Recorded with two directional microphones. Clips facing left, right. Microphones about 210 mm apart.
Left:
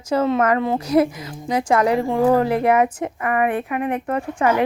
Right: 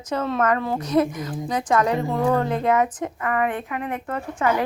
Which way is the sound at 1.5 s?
30° left (ahead or behind).